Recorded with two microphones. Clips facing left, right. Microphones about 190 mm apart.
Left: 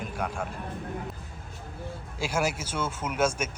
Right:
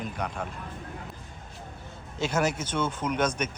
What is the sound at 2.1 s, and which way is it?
Speech, 10° left (ahead or behind).